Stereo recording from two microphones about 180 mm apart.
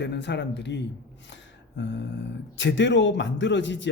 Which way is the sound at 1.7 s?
75° left (ahead or behind).